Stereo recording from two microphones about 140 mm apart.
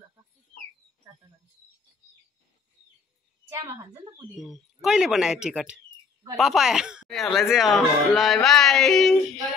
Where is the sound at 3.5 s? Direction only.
20° right (ahead or behind).